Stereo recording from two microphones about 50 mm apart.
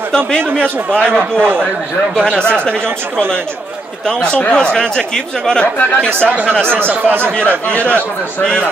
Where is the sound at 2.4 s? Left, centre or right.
Left.